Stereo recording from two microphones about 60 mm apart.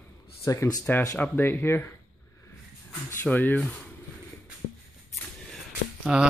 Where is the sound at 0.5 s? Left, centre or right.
Left.